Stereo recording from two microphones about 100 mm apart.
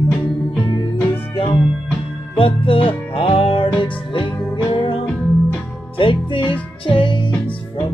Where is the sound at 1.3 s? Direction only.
60° left (ahead or behind).